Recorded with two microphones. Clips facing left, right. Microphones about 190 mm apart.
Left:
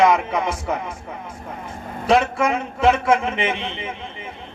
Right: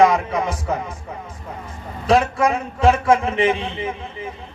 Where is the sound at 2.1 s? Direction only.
30° right (ahead or behind).